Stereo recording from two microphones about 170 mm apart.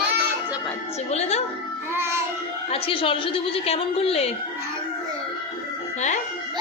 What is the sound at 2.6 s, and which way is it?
Speech, 35° left (ahead or behind).